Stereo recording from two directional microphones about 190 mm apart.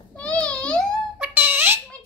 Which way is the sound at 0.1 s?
5° left (ahead or behind).